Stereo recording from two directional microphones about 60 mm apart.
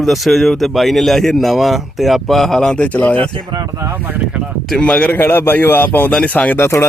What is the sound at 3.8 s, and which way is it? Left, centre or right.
Speech, right.